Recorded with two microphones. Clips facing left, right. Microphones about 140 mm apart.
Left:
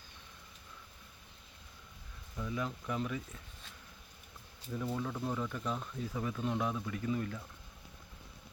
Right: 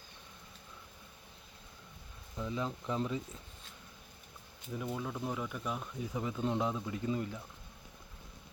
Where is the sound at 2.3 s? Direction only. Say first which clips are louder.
Right 1 dB; 20° right (ahead or behind).